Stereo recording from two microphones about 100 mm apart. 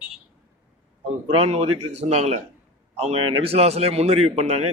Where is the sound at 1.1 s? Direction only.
80° right.